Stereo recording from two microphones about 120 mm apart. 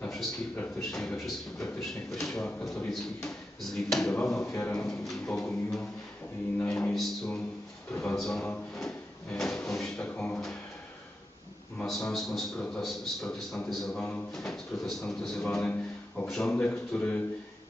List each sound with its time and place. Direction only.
0.0 s a sound: centre (ahead or behind)
0.7 s a man's voice: 5° left (ahead or behind)
4.4 s a man's voice: 20° left (ahead or behind)
4.8 s a man's voice: 5° left (ahead or behind)
8.7 s drawer open or close: 5° left (ahead or behind)
11.8 s a man's voice: centre (ahead or behind)